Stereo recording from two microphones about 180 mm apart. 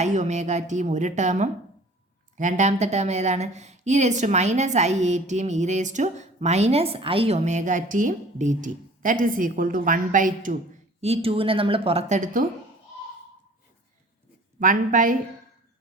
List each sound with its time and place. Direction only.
0.0 s speech: 40° right (ahead or behind)
11.0 s speech: 35° right (ahead or behind)
14.6 s a woman's voice: 45° right (ahead or behind)